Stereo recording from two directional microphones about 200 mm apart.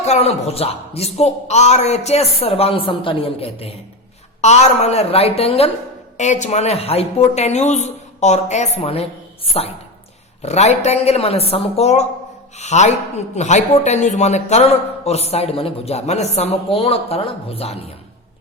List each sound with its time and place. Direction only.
0.0 s a man's voice: 35° left (ahead or behind)